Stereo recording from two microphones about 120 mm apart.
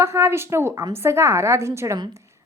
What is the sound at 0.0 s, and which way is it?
A woman's voice, 20° right (ahead or behind).